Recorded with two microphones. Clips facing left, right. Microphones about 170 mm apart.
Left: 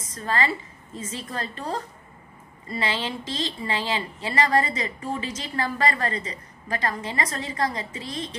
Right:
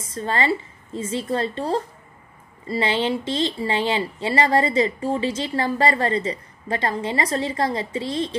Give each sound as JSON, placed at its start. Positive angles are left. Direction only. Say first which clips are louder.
{"t": 0.0, "sound": "a woman's voice", "louder": "right 3 dB", "side_deg": -30}